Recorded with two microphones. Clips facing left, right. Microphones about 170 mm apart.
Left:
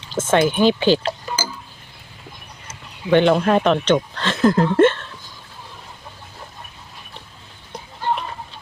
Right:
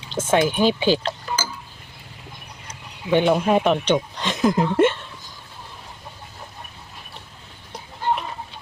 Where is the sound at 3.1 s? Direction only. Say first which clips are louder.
Left 3 dB; 10° right (ahead or behind).